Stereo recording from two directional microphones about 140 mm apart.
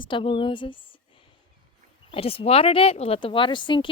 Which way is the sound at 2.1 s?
45° left (ahead or behind).